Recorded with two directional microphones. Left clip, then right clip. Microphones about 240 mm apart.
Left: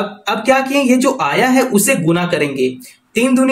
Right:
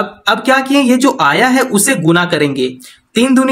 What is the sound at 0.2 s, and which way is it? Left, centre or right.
Speech, right.